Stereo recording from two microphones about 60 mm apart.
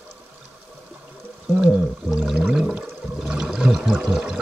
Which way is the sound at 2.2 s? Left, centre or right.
Centre.